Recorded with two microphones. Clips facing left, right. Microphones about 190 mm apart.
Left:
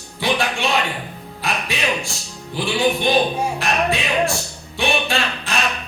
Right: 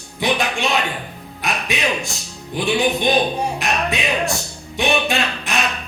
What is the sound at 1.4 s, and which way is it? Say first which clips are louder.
Speech: right 1 dB; 20° right (ahead or behind).